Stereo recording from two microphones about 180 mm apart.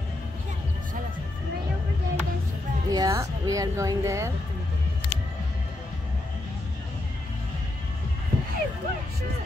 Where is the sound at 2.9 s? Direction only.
20° right (ahead or behind).